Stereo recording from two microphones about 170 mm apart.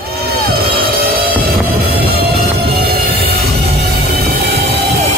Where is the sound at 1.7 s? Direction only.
65° right (ahead or behind).